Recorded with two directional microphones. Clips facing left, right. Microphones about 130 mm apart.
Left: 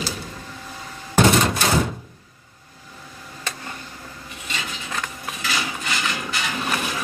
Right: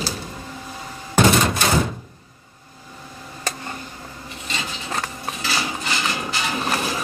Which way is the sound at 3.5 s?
35° right (ahead or behind).